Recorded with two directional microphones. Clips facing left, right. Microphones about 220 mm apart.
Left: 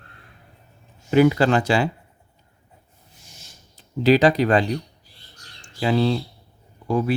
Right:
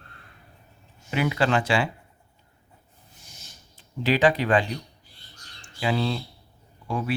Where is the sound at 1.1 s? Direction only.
40° left (ahead or behind).